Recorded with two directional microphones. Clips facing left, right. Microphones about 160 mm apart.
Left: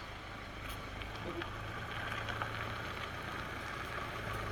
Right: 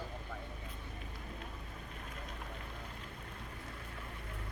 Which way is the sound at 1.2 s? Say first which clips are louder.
Left 5 dB; 90° left.